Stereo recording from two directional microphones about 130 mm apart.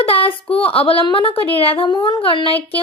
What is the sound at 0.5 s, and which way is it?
Speech, 45° left (ahead or behind).